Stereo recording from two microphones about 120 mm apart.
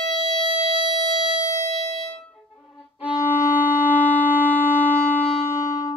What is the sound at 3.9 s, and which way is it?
Wind instrument, 15° left (ahead or behind).